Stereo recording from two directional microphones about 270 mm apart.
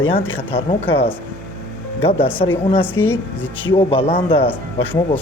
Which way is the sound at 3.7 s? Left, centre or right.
Centre.